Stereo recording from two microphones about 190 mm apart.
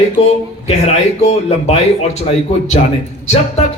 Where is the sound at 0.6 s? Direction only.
35° left (ahead or behind).